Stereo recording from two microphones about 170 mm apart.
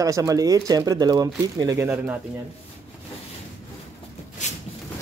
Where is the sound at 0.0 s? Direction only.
20° right (ahead or behind).